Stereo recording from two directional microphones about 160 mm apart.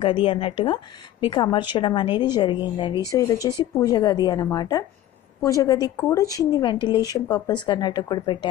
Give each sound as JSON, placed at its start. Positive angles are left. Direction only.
{"t": 0.0, "sound": "a woman's voice", "side_deg": 35}